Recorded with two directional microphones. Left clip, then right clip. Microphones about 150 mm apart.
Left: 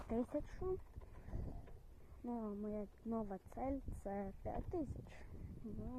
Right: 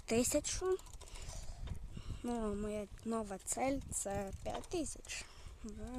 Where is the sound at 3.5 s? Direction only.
70° right (ahead or behind).